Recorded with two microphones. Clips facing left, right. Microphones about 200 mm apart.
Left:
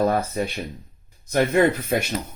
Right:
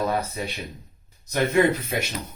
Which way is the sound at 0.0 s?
50° left (ahead or behind).